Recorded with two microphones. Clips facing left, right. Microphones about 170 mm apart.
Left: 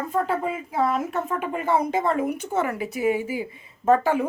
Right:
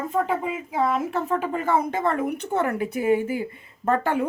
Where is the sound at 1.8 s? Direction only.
55° right (ahead or behind).